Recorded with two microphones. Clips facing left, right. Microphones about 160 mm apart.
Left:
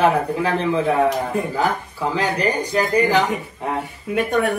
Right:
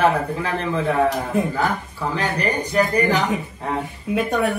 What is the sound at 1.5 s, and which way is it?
Speech, 10° left (ahead or behind).